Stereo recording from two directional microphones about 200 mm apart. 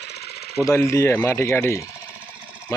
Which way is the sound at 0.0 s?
55° left (ahead or behind).